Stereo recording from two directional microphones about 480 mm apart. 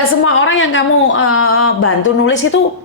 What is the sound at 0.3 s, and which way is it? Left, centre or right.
A woman's voice, left.